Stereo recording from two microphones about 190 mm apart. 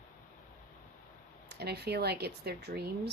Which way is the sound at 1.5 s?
60° right (ahead or behind).